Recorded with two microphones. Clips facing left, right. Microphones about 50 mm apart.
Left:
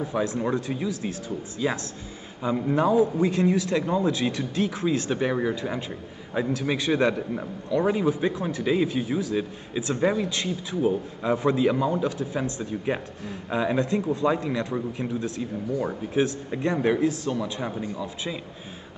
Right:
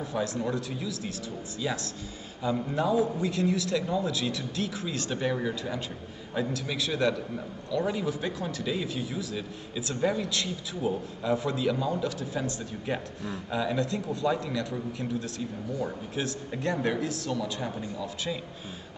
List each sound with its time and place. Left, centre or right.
0.0 s a man's voice: left